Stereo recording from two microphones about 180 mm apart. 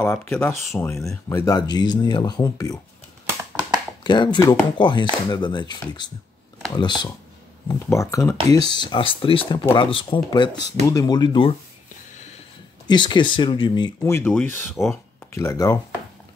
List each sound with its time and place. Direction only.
0.0 s speech: 10° left (ahead or behind)
4.0 s speech: 25° left (ahead or behind)
12.8 s speech: 25° left (ahead or behind)
14.1 s speech: 10° left (ahead or behind)